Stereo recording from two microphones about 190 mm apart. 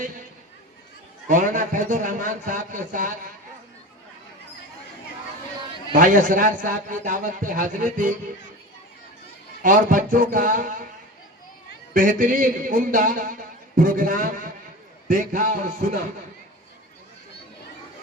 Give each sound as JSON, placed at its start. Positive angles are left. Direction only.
{"t": 1.3, "sound": "a man's voice", "side_deg": -45}
{"t": 5.9, "sound": "a man's voice", "side_deg": -45}
{"t": 9.6, "sound": "a man's voice", "side_deg": -45}
{"t": 11.9, "sound": "a man's voice", "side_deg": -45}